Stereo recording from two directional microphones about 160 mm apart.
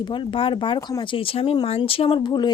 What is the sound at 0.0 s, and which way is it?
Speech, 30° left (ahead or behind).